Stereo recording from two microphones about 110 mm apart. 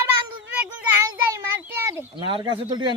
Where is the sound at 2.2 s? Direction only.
45° right (ahead or behind).